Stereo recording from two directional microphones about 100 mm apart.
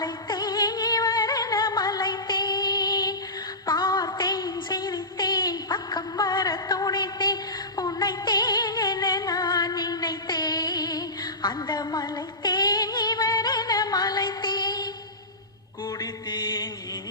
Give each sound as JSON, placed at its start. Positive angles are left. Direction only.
{"t": 0.0, "sound": "music", "side_deg": 45}
{"t": 3.7, "sound": "a sound", "side_deg": 45}
{"t": 7.8, "sound": "music", "side_deg": 40}
{"t": 15.9, "sound": "music", "side_deg": 45}